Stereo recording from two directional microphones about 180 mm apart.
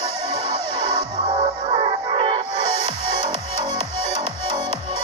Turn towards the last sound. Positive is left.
turn(degrees=-25)  # may be behind; listen again after turning